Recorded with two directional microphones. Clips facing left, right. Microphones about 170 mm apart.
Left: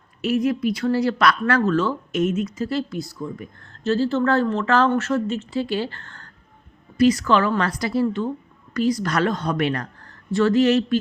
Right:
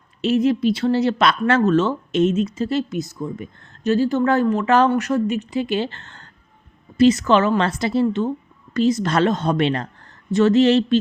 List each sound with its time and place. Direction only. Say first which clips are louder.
0.2 s a woman's voice: right 3 dB; 25° right (ahead or behind)